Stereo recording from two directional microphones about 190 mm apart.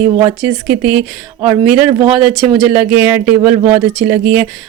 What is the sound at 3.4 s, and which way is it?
Speech, 30° right (ahead or behind).